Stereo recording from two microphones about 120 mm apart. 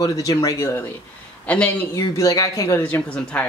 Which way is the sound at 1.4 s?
15° left (ahead or behind).